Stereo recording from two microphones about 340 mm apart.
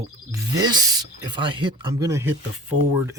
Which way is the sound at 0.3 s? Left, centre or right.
Centre.